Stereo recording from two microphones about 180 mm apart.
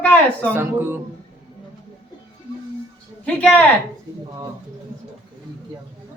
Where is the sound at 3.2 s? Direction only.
5° left (ahead or behind).